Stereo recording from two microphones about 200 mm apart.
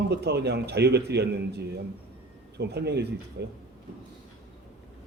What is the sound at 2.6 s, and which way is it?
Speech, 55° right (ahead or behind).